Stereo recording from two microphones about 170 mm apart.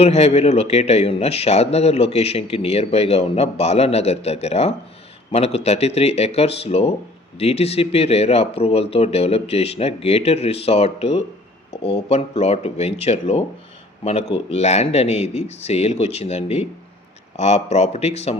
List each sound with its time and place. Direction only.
0.0 s a man's voice: 40° left (ahead or behind)